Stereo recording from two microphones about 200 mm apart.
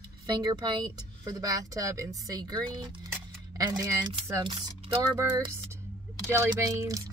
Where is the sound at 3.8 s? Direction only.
20° right (ahead or behind).